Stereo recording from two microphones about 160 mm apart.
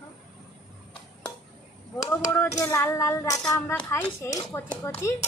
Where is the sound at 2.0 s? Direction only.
20° left (ahead or behind).